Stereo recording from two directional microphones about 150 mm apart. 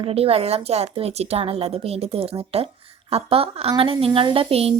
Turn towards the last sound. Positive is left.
turn(degrees=-40)  # may be behind; listen again after turning